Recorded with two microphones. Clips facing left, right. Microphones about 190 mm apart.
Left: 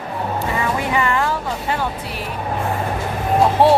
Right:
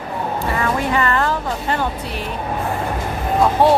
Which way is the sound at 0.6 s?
15° left (ahead or behind).